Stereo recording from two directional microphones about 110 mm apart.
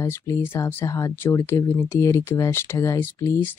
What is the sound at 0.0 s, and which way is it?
Speech, 20° left (ahead or behind).